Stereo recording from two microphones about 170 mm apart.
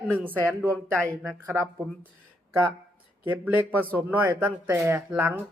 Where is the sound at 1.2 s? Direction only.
Centre (ahead or behind).